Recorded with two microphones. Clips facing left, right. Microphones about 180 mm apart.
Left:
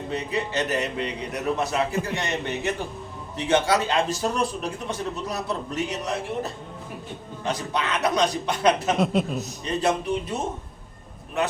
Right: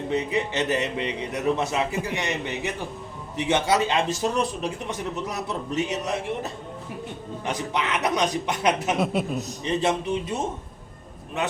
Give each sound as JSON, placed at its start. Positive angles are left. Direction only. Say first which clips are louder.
{"t": 0.1, "sound": "a man's voice", "louder": "right 2 dB", "side_deg": -20}
{"t": 9.0, "sound": "speech", "louder": "left 1 dB", "side_deg": -5}
{"t": 9.6, "sound": "a man's voice", "louder": "even", "side_deg": -20}